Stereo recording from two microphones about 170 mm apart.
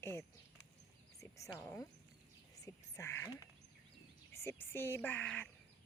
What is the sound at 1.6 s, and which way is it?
Speech, 15° left (ahead or behind).